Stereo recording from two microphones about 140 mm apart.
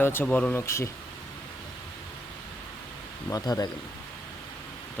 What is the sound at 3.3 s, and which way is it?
Speech, 25° left (ahead or behind).